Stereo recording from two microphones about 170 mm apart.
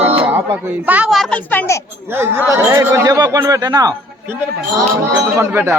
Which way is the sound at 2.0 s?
15° right (ahead or behind).